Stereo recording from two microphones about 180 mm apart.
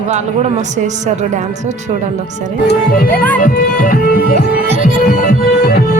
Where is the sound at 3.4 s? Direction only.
50° left (ahead or behind).